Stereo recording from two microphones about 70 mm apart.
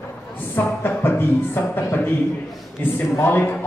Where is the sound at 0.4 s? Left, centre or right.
Left.